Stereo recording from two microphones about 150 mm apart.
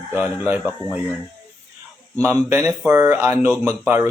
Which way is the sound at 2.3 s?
20° right (ahead or behind).